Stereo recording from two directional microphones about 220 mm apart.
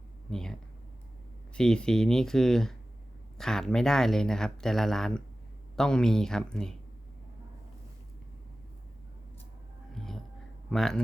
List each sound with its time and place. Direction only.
0.3 s speech: centre (ahead or behind)
1.5 s speech: 5° left (ahead or behind)
9.9 s a sound: centre (ahead or behind)
10.7 s speech: centre (ahead or behind)